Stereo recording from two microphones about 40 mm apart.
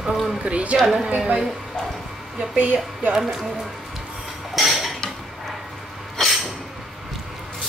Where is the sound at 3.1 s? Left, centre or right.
Centre.